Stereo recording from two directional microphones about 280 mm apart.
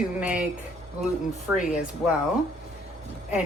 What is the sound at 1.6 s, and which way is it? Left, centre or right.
Speech, left.